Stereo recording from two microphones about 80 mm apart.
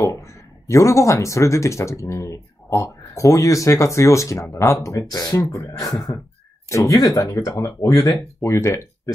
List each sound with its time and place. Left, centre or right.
0.0 s speech: left